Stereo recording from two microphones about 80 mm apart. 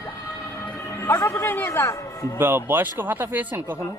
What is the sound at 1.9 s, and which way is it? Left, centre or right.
Speech, left.